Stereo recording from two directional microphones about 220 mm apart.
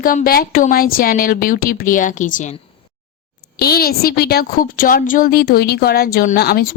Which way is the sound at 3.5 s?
45° left (ahead or behind).